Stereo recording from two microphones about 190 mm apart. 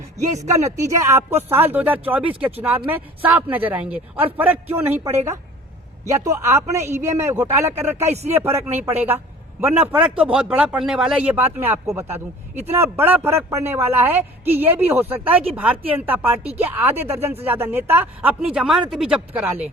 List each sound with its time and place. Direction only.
0.5 s a man's voice: 15° right (ahead or behind)
8.1 s speech: 35° right (ahead or behind)
8.4 s a man's voice: 10° right (ahead or behind)